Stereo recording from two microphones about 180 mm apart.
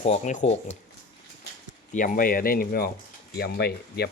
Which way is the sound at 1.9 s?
45° left (ahead or behind).